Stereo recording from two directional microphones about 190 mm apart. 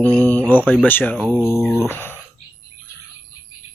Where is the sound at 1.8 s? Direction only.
10° left (ahead or behind).